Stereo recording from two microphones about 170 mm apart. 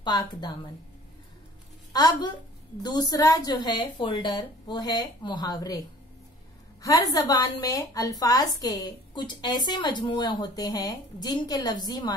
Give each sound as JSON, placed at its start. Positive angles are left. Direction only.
{"t": 0.0, "sound": "a woman's voice", "side_deg": 25}
{"t": 1.9, "sound": "a woman's voice", "side_deg": 20}
{"t": 6.8, "sound": "a woman's voice", "side_deg": 20}